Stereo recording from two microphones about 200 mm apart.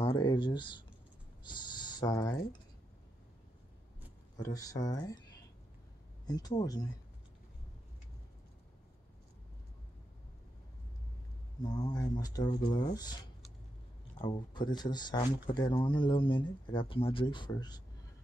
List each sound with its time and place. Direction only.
0.0 s speech: 25° left (ahead or behind)
4.4 s speech: 15° left (ahead or behind)
6.2 s speech: 20° left (ahead or behind)
11.6 s speech: 20° left (ahead or behind)
14.1 s speech: 25° left (ahead or behind)